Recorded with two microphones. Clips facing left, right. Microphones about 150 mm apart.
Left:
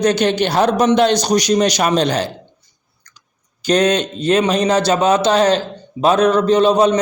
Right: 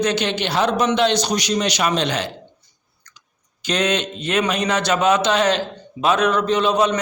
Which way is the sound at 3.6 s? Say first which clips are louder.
Left 6 dB; 40° left (ahead or behind).